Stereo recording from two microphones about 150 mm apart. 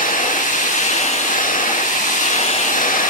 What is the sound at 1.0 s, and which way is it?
Vehicle, 60° left (ahead or behind).